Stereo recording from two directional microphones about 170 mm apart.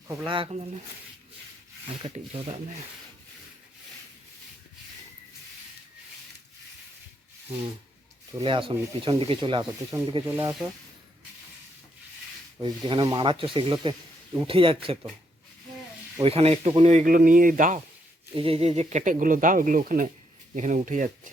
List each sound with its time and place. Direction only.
0.3 s speech: 30° right (ahead or behind)
2.0 s speech: 35° right (ahead or behind)
8.4 s speech: 30° right (ahead or behind)
10.2 s speech: 15° right (ahead or behind)
12.6 s speech: 25° right (ahead or behind)
16.2 s speech: 35° right (ahead or behind); by 17.7 s 55° right (ahead or behind)
18.3 s speech: 35° right (ahead or behind); by 21.1 s 50° right (ahead or behind)